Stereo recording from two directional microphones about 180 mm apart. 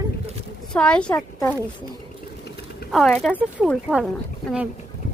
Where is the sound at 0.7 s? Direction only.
5° left (ahead or behind).